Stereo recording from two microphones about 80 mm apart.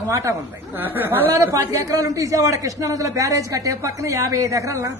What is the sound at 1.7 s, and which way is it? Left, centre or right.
A man's voice, right.